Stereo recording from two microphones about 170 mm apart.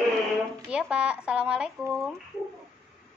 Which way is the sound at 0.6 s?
5° right (ahead or behind).